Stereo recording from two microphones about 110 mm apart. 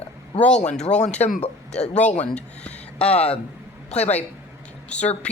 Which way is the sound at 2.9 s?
65° left (ahead or behind).